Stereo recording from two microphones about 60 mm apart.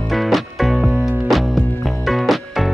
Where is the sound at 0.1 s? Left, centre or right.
Centre.